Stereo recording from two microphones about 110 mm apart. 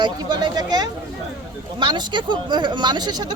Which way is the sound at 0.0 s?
40° right (ahead or behind).